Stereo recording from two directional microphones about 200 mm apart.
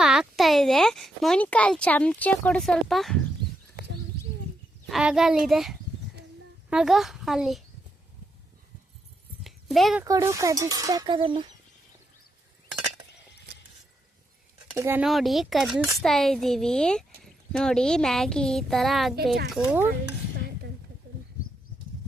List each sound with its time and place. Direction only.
0.0 s a child's voice: 5° right (ahead or behind)
4.9 s speech: centre (ahead or behind)
9.4 s a sound: centre (ahead or behind)
10.0 s speech: 15° right (ahead or behind)
14.7 s speech: 10° right (ahead or behind)